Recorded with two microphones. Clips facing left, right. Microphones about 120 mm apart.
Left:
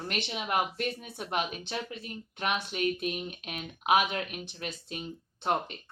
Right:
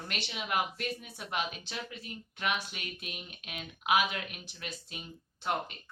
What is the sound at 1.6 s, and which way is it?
Speech, 50° left (ahead or behind).